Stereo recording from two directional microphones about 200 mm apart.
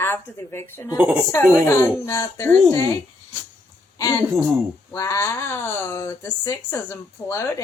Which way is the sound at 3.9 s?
15° left (ahead or behind).